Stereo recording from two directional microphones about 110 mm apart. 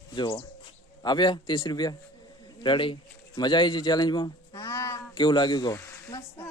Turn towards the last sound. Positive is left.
turn(degrees=25)  # may be behind; listen again after turning